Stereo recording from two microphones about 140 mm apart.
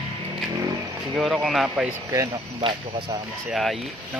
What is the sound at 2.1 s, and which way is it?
Speech, 30° right (ahead or behind).